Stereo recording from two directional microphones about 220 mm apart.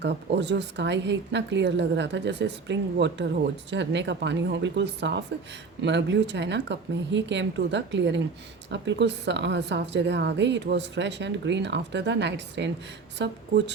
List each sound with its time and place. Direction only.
0.0 s a woman's voice: 50° right (ahead or behind)